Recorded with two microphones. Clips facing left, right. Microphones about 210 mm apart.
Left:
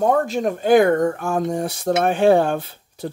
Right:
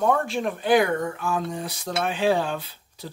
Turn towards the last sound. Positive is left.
turn(degrees=50)  # may be behind; listen again after turning